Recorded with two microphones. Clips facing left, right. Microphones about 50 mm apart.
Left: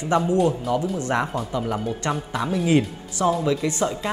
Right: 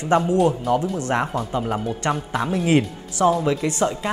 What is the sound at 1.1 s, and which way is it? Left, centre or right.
Speech, centre.